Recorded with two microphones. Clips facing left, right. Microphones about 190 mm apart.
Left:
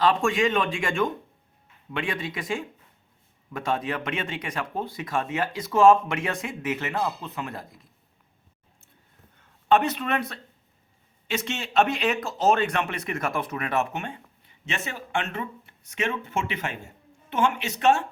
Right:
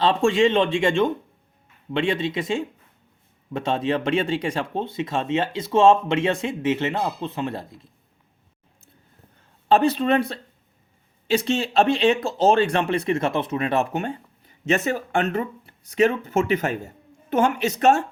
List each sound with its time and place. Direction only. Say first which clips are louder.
0.0 s speech: right 4 dB; 25° right (ahead or behind)
9.6 s speech: right 4 dB; 30° right (ahead or behind)